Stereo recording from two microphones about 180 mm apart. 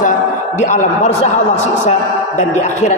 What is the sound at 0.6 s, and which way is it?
A man's voice, 40° left (ahead or behind).